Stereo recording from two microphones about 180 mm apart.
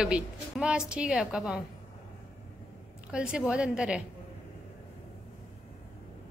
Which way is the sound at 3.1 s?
5° right (ahead or behind).